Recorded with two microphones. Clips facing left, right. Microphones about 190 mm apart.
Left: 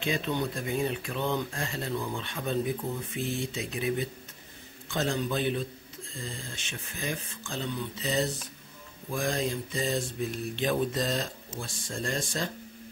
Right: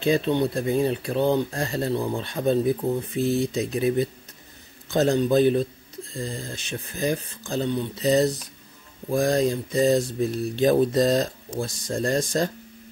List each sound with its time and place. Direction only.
0.0 s speech: 35° right (ahead or behind)